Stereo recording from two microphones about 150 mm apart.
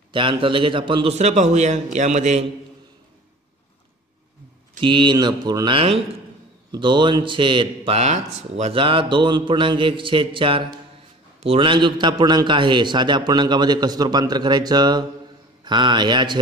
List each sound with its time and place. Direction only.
0.1 s a man's voice: 35° right (ahead or behind); by 2.4 s 50° right (ahead or behind)
4.7 s a man's voice: 30° right (ahead or behind)